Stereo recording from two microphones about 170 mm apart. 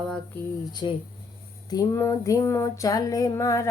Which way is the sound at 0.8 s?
30° left (ahead or behind).